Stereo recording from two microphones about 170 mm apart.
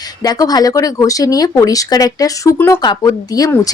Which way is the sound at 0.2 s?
20° left (ahead or behind).